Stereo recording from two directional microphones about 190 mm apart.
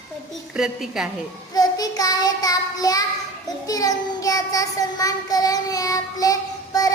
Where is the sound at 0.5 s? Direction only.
5° right (ahead or behind).